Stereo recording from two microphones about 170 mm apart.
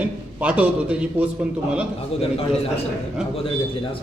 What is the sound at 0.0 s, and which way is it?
A man's voice, 10° right (ahead or behind).